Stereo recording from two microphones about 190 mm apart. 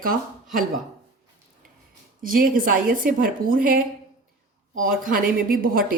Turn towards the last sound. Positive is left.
turn(degrees=-50)  # may be behind; listen again after turning